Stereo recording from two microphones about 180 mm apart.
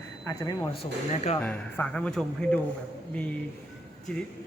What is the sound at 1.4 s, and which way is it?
Speech, 10° left (ahead or behind).